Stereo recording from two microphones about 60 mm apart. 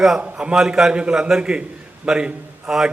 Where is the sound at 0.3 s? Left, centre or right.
Centre.